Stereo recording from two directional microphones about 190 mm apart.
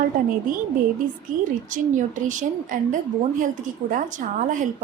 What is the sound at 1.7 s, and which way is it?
A woman's voice, 40° right (ahead or behind).